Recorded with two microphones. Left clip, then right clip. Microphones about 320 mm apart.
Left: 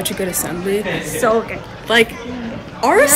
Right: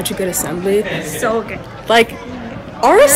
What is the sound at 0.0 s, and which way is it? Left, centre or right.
Speech, centre.